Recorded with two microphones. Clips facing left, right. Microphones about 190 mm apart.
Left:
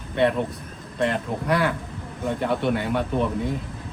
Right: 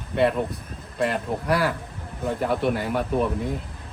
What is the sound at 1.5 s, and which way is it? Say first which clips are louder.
Speech: left 1 dB; 5° right (ahead or behind).